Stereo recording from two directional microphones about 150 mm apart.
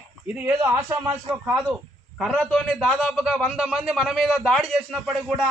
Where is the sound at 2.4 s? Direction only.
5° left (ahead or behind).